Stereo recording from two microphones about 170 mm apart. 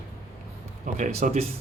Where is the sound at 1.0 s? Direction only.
50° right (ahead or behind).